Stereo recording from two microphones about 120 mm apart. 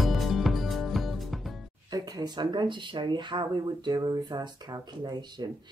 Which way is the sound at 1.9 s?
35° right (ahead or behind).